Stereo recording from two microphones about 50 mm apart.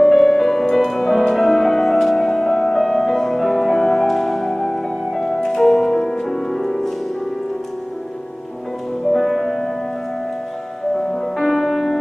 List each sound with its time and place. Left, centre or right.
0.0 s music: centre
9.0 s music: centre
11.0 s music: centre